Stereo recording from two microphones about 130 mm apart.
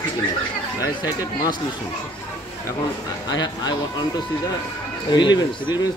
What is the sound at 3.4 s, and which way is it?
Speech, 35° left (ahead or behind).